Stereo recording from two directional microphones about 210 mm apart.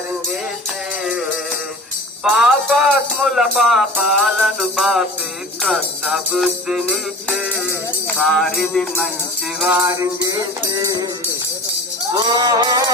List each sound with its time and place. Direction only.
2.3 s music: centre (ahead or behind)
9.6 s music: 15° right (ahead or behind)
12.1 s music: 20° right (ahead or behind)